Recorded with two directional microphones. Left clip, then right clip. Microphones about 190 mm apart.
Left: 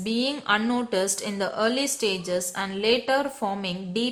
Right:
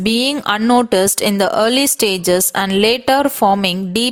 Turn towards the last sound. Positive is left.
turn(degrees=-50)  # may be behind; listen again after turning